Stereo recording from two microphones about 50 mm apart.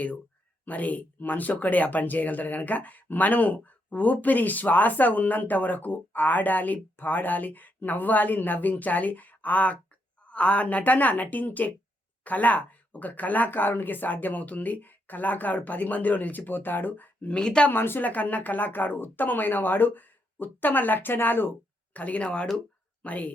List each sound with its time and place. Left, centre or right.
0.6 s speech: left
17.3 s speech: centre
17.7 s speech: left
18.0 s speech: left
21.9 s speech: left